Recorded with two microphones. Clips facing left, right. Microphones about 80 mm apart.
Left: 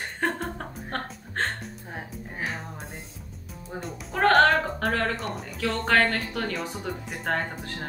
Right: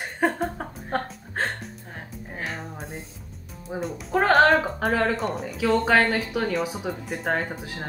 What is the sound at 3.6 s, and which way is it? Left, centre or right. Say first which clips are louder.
Speech: right 5 dB; centre.